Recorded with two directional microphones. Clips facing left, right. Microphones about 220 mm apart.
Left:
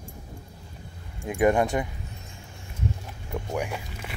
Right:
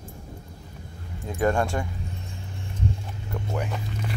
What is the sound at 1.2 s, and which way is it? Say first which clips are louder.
Speech: left 2 dB; 15° left (ahead or behind).